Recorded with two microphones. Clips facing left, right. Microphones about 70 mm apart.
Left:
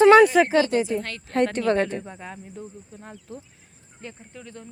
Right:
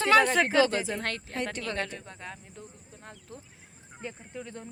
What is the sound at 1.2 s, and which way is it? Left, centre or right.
Speech, left.